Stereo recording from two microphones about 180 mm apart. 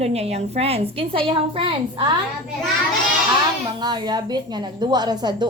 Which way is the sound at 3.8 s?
25° right (ahead or behind).